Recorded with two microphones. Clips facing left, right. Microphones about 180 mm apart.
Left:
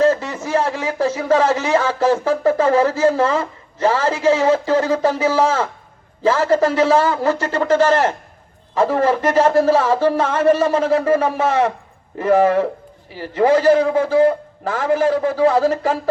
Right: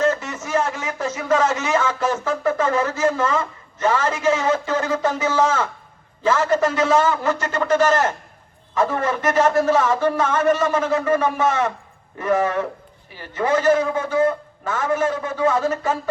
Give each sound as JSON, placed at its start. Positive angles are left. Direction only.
{"t": 0.0, "sound": "speech", "side_deg": 30}